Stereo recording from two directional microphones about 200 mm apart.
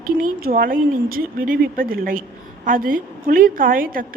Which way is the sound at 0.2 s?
45° right (ahead or behind).